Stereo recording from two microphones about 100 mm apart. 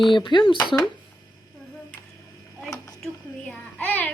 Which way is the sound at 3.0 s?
10° left (ahead or behind).